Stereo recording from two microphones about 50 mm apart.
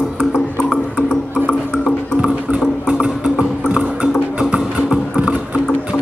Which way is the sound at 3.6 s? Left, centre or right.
Right.